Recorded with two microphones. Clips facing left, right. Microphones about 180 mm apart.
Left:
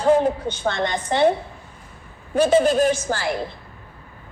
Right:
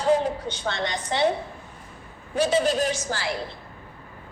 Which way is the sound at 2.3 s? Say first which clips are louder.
Left 5 dB; 50° left (ahead or behind).